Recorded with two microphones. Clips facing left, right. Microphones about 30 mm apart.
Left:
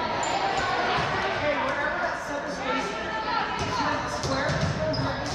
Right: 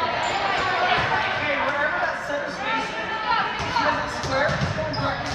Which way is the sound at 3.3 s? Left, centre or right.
Right.